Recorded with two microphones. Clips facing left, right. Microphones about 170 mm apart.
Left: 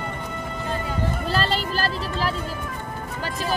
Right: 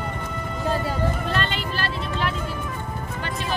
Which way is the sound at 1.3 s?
35° left (ahead or behind).